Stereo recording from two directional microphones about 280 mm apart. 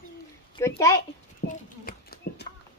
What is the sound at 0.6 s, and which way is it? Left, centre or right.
Speech, centre.